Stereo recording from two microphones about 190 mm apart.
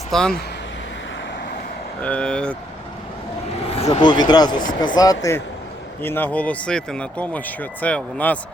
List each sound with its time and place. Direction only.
0.1 s speech: centre (ahead or behind)
2.0 s speech: 5° left (ahead or behind)
3.7 s speech: 30° left (ahead or behind); by 8.4 s 5° left (ahead or behind)